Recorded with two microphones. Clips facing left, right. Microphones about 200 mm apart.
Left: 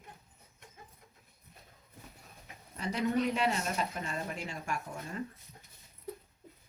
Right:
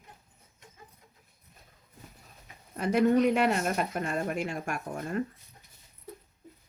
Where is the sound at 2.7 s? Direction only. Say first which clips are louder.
Right 8 dB; 55° right (ahead or behind).